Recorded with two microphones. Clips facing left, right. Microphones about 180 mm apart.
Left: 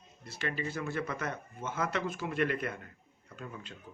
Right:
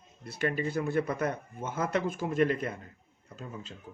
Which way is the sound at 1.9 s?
50° right (ahead or behind).